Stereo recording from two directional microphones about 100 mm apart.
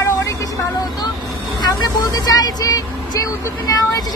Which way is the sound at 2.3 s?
40° left (ahead or behind).